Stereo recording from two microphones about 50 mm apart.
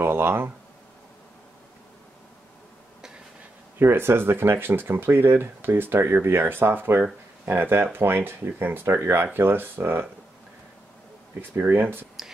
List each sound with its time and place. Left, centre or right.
0.0 s speech: right
3.8 s speech: right
11.5 s speech: right